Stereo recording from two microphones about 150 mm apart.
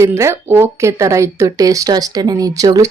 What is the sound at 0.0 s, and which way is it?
Speech, 15° right (ahead or behind).